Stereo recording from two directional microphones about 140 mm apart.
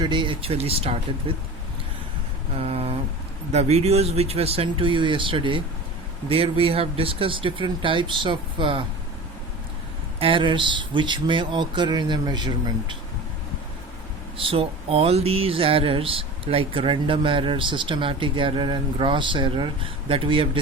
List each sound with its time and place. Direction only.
0.0 s speech: 35° right (ahead or behind)
2.6 s speech: 45° right (ahead or behind)
10.2 s speech: 40° right (ahead or behind)
14.3 s speech: 40° right (ahead or behind)